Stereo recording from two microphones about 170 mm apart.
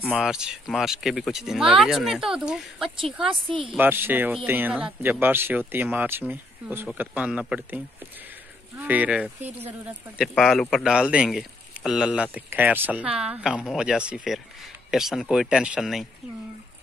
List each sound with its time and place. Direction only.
0.1 s speech: 5° right (ahead or behind)
3.4 s speech: 30° right (ahead or behind)
3.7 s speech: 10° right (ahead or behind)